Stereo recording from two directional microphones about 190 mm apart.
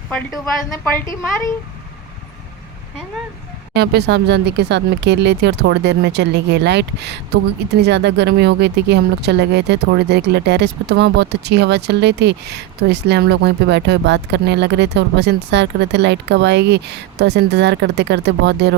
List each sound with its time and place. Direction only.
0.1 s speech: 5° left (ahead or behind)
3.8 s speech: 60° right (ahead or behind)